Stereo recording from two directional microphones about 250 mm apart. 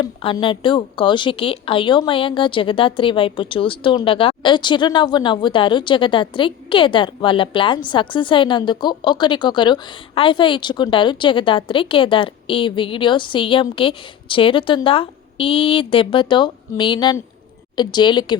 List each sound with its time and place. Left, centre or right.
0.0 s a woman's voice: centre